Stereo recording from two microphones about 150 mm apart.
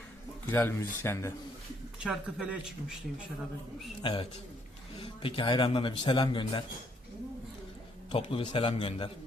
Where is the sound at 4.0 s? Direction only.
35° left (ahead or behind).